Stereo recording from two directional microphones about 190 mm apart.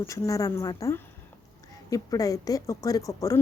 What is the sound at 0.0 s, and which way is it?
A woman's voice, 15° left (ahead or behind).